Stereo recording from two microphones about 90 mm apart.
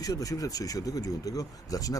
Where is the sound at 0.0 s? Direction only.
45° left (ahead or behind).